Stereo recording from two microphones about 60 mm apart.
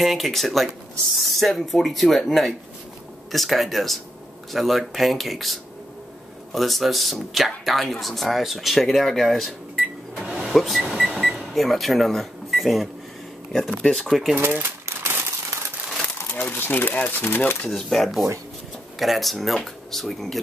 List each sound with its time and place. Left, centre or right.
0.0 s speech: centre
10.1 s a sound: centre
11.3 s speech: centre
14.0 s speech: centre
14.4 s typewriter: right
16.3 s speech: left
17.6 s speech: centre